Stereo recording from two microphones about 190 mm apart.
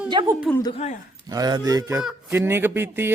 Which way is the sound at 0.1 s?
25° right (ahead or behind).